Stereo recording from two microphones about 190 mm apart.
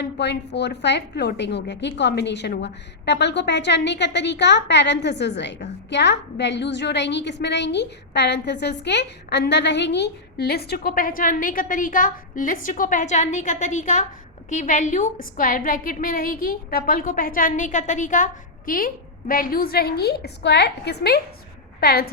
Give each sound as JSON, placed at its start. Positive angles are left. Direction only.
{"t": 0.0, "sound": "a woman's voice", "side_deg": 65}